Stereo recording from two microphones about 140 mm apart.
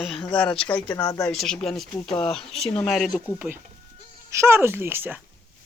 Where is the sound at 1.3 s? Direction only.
5° left (ahead or behind).